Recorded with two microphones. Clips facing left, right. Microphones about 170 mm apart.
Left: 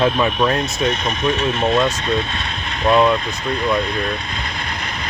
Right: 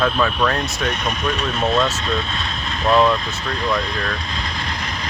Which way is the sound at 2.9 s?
15° left (ahead or behind).